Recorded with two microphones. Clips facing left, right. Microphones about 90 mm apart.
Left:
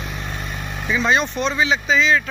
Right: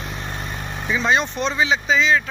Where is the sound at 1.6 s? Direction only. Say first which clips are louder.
Even; 25° right (ahead or behind).